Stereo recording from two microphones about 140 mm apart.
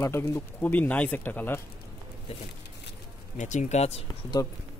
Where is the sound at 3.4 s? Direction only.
60° left (ahead or behind).